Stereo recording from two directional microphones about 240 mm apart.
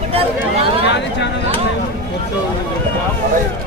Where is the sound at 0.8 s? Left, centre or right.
Left.